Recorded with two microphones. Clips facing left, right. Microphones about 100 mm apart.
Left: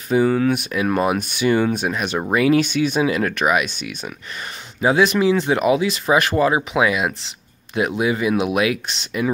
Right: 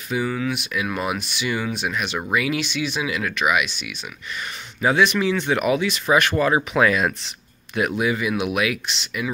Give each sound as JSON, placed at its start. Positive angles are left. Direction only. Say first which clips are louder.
{"t": 0.1, "sound": "speech", "louder": "left 7 dB", "side_deg": 40}
{"t": 2.0, "sound": "speech", "louder": "left 2 dB", "side_deg": 30}